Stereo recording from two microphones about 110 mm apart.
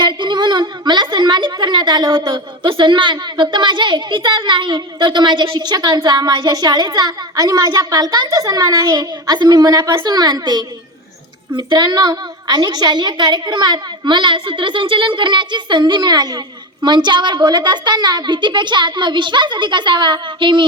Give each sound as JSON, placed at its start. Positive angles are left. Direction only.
{"t": 0.0, "sound": "a woman's voice", "side_deg": -45}